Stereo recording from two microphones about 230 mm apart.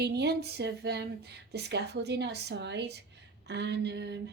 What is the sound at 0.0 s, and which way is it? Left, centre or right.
Speech, right.